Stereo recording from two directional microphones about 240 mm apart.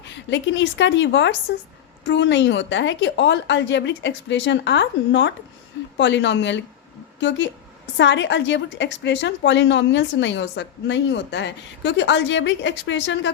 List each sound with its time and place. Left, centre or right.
0.0 s a woman's voice: left